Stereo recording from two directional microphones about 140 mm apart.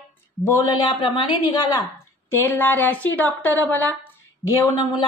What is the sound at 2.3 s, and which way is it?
A woman's voice, 15° left (ahead or behind).